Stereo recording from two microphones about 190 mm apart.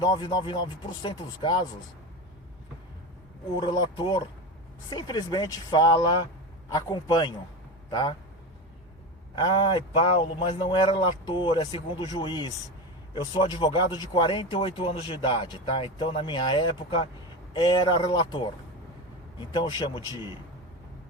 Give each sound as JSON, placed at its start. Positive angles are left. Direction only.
{"t": 0.0, "sound": "speech", "side_deg": 25}
{"t": 3.6, "sound": "speech", "side_deg": 25}
{"t": 9.3, "sound": "speech", "side_deg": 25}